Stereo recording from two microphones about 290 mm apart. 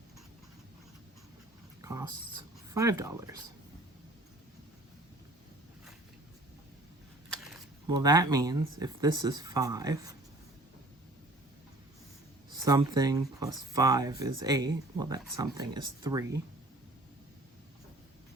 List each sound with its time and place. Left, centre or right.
1.8 s speech: centre
7.9 s speech: centre
12.6 s speech: centre